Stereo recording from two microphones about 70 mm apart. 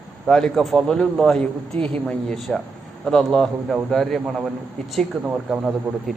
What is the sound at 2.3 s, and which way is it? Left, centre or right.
A man's voice, centre.